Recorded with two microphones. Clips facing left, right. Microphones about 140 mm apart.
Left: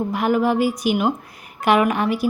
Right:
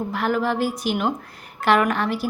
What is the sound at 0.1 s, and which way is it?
A woman's voice, 15° left (ahead or behind).